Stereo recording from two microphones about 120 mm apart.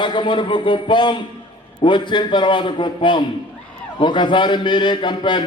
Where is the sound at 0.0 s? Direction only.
45° left (ahead or behind).